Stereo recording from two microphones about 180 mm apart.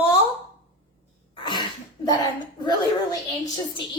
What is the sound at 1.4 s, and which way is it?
Sneeze, 25° left (ahead or behind).